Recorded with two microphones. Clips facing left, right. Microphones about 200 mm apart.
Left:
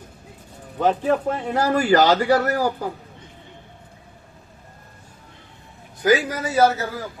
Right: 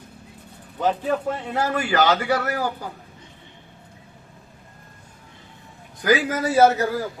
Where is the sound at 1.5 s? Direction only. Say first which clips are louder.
Left 5 dB; 35° left (ahead or behind).